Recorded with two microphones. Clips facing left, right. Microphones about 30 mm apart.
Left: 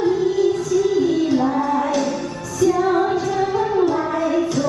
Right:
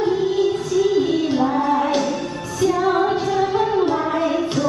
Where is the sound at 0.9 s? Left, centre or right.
Right.